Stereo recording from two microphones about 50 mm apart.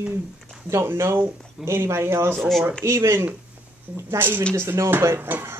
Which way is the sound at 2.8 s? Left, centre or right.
Right.